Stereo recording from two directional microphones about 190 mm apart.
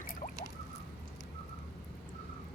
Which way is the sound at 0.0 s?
45° left (ahead or behind).